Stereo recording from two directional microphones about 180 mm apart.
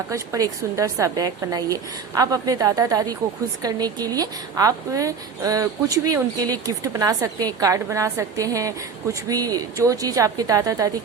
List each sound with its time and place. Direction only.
0.1 s a woman's voice: 20° right (ahead or behind)